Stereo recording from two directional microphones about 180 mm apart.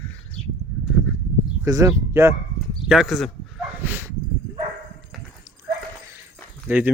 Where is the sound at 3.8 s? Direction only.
10° right (ahead or behind).